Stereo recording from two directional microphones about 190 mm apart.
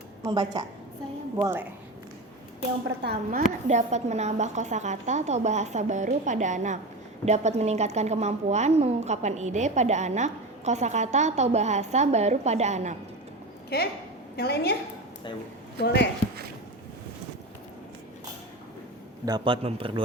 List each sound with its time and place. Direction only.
0.2 s a woman's voice: 20° right (ahead or behind)
3.0 s a woman's voice: 55° right (ahead or behind)
3.7 s a woman's voice: 35° right (ahead or behind)
13.7 s a woman's voice: 55° left (ahead or behind)
15.8 s a woman's voice: 65° left (ahead or behind)
19.2 s speech: 25° right (ahead or behind)